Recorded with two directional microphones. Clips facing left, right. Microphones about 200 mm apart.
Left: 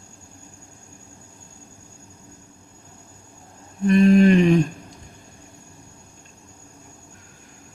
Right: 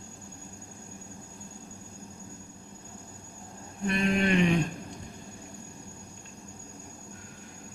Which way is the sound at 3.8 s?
35° left (ahead or behind).